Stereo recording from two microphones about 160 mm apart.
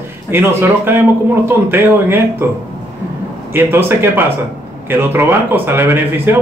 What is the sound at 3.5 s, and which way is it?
Speech, 15° right (ahead or behind).